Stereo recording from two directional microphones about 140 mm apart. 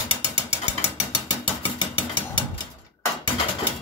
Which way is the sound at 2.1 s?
30° left (ahead or behind).